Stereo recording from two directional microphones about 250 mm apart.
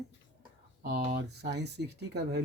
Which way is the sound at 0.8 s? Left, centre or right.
Right.